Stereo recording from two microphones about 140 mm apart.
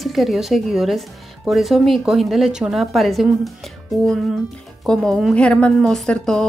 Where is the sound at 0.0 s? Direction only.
Centre (ahead or behind).